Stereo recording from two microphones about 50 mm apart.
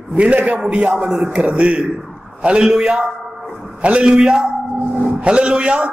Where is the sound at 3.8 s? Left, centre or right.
Right.